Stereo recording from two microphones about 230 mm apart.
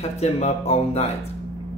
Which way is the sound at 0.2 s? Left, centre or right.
Left.